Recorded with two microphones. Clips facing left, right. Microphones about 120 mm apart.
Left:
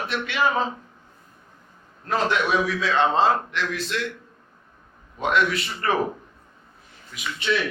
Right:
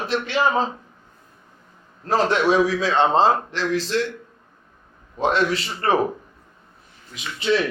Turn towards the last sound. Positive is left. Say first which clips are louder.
# right 4 dB
turn(degrees=-30)  # may be behind; listen again after turning